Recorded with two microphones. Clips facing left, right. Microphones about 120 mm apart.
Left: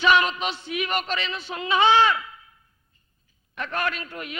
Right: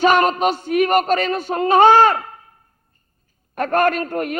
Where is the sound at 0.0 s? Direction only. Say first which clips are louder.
Right 6 dB; 45° right (ahead or behind).